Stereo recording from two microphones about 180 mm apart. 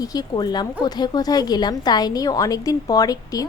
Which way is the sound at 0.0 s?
20° left (ahead or behind).